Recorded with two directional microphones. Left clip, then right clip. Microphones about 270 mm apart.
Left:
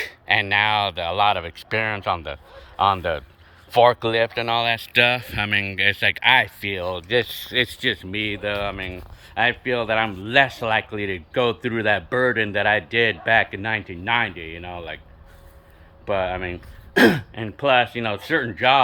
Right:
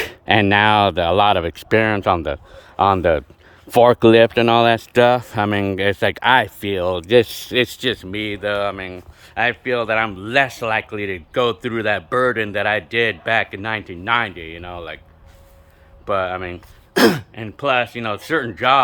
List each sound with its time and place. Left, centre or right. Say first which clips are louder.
0.0 s speech: right 4 dB; right; by 15.0 s centre
16.0 s speech: right 3 dB; centre